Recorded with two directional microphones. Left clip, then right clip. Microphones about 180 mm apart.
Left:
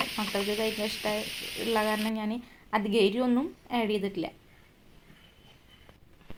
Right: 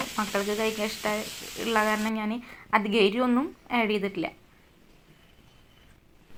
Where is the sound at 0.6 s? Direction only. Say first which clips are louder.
Right 2 dB; 5° right (ahead or behind).